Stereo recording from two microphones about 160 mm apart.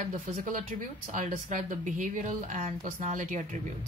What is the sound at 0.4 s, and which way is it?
Speech, 55° right (ahead or behind).